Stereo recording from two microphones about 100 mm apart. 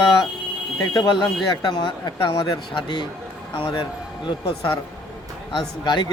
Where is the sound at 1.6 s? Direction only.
55° left (ahead or behind).